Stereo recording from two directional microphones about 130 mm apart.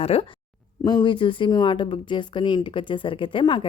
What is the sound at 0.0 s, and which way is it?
Speech, 50° left (ahead or behind).